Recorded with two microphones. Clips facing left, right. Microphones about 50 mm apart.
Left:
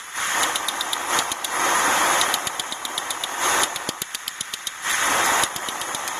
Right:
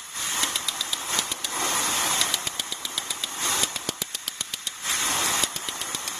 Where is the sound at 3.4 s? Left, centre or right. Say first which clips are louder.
Left 8 dB; left.